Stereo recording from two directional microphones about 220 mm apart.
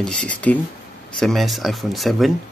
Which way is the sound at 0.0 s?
5° left (ahead or behind).